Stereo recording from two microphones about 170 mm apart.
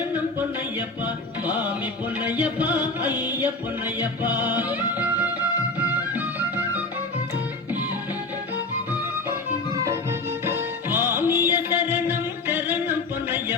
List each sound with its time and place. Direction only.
2.2 s music: 10° right (ahead or behind)
10.4 s music: 10° right (ahead or behind)